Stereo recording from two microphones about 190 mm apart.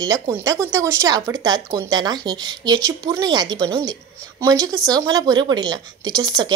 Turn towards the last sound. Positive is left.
turn(degrees=-20)  # may be behind; listen again after turning